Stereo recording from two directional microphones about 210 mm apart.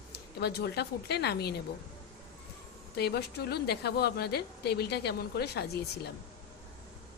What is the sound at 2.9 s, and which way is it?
A woman's voice, 50° left (ahead or behind).